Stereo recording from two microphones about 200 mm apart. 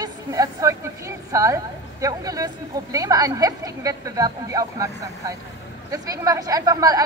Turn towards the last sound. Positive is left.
turn(degrees=-20)  # may be behind; listen again after turning